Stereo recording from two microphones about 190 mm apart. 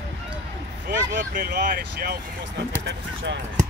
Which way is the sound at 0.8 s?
50° right (ahead or behind).